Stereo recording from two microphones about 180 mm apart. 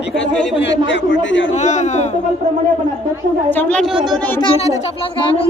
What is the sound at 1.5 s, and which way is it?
Speech, 40° left (ahead or behind).